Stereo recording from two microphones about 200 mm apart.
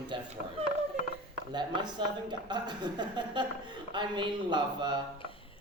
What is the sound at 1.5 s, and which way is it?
Speech, 20° right (ahead or behind).